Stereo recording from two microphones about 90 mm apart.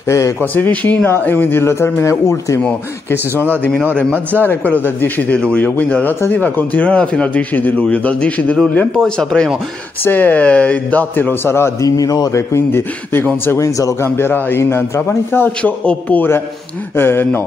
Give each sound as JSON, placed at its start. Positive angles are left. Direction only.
{"t": 0.4, "sound": "a man's voice", "side_deg": 20}
{"t": 3.1, "sound": "a man's voice", "side_deg": 20}
{"t": 10.0, "sound": "a man's voice", "side_deg": 20}
{"t": 12.0, "sound": "speech", "side_deg": 45}
{"t": 13.6, "sound": "speech", "side_deg": 35}
{"t": 14.1, "sound": "a man's voice", "side_deg": 25}
{"t": 16.9, "sound": "a man's voice", "side_deg": 25}